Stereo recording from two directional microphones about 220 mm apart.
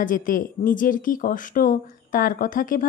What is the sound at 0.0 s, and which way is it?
Speech, 40° left (ahead or behind).